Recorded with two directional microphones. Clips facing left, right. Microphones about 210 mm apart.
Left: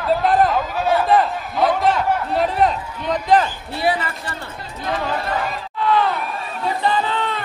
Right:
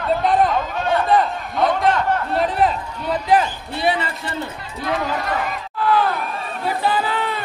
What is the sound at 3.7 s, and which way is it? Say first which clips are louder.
Speech: even; 20° right (ahead or behind).